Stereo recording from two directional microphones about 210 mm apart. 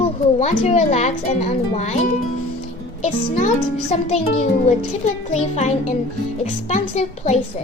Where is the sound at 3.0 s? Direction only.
35° left (ahead or behind).